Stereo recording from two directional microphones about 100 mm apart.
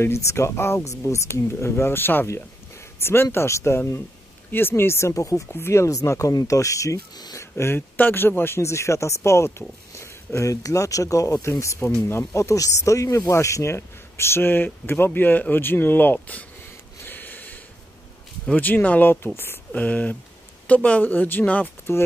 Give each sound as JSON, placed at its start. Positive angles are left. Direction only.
{"t": 0.0, "sound": "speech", "side_deg": 25}
{"t": 7.5, "sound": "speech", "side_deg": 25}
{"t": 17.0, "sound": "a sound", "side_deg": 20}
{"t": 18.5, "sound": "speech", "side_deg": 15}